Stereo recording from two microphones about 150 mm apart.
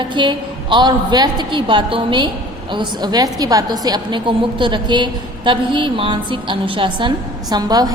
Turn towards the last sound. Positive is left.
turn(degrees=-25)  # may be behind; listen again after turning